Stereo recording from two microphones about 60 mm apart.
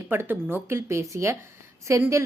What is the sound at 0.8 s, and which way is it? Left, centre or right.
A woman's voice, right.